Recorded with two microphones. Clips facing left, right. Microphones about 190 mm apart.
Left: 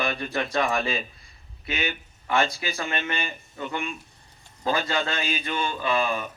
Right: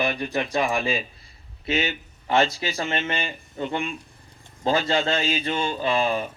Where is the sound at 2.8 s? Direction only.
30° right (ahead or behind).